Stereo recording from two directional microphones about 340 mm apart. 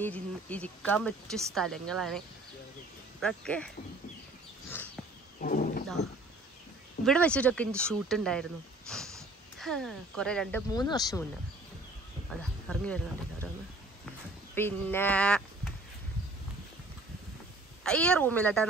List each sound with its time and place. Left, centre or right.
0.0 s speech: centre
5.4 s wild animals: left
7.1 s speech: centre
12.3 s speech: centre
14.5 s speech: centre
17.8 s speech: centre